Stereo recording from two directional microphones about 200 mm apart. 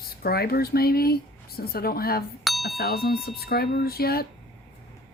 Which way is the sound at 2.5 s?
Centre (ahead or behind).